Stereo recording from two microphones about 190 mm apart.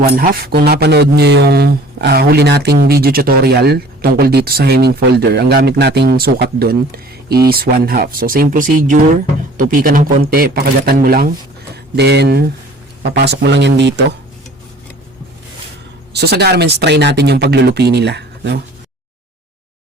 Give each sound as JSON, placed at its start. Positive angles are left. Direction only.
{"t": 0.0, "sound": "speech", "side_deg": -55}
{"t": 16.1, "sound": "speech", "side_deg": -60}